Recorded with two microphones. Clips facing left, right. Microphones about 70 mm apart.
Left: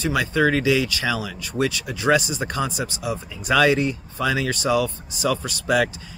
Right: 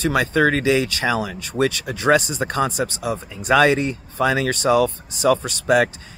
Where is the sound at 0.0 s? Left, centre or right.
Right.